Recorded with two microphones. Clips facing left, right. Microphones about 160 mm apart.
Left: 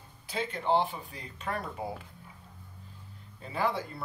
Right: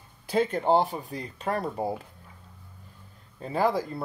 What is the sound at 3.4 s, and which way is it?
Speech, 40° right (ahead or behind).